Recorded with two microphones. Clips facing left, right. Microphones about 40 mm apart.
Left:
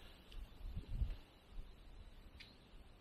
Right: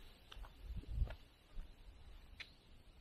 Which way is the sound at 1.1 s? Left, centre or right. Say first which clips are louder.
Right 5 dB; right.